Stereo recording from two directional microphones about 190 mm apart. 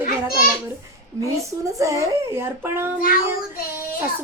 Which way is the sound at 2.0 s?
15° right (ahead or behind).